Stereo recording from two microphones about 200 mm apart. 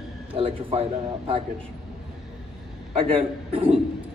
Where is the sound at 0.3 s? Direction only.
25° right (ahead or behind).